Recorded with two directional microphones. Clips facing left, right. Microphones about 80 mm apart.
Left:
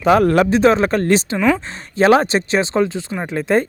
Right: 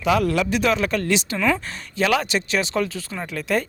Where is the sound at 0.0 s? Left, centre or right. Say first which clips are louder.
Left 7 dB; left.